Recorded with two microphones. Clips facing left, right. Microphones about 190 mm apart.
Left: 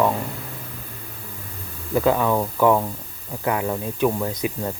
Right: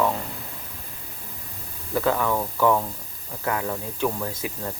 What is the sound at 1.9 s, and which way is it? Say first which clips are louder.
Speech: left 4 dB; 15° left (ahead or behind).